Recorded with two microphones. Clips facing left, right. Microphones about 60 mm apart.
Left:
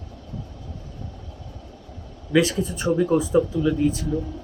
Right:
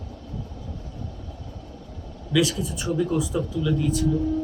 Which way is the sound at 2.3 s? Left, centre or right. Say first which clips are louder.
Left 3 dB; left.